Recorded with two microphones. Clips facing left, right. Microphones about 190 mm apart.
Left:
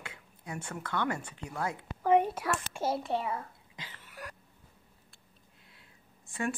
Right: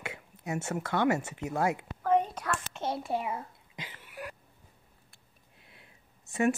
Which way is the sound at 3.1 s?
15° right (ahead or behind).